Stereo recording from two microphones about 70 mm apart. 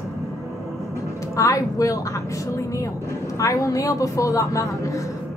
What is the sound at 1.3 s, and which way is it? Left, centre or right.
A woman's voice, left.